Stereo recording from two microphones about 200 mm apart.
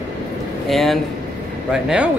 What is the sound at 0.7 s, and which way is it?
Speech, centre (ahead or behind).